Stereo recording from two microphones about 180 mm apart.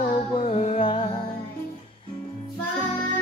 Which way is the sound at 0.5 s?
35° left (ahead or behind).